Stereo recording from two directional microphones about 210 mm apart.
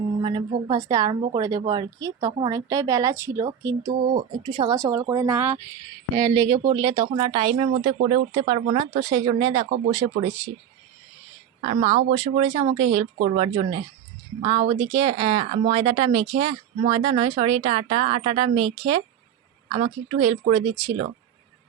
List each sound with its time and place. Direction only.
0.2 s a sound: 25° right (ahead or behind)
0.7 s speech: 15° right (ahead or behind)
11.6 s speech: 30° right (ahead or behind)